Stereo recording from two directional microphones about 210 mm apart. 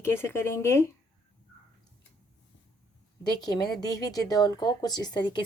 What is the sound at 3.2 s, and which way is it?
Speech, 20° left (ahead or behind).